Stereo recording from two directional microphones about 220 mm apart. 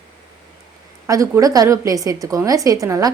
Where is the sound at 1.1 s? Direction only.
15° right (ahead or behind).